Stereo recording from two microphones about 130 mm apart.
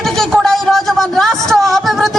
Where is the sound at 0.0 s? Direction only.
Centre (ahead or behind).